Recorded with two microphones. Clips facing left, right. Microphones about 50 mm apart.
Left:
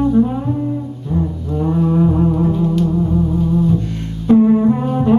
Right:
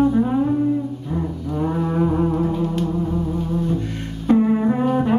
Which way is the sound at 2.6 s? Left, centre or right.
Right.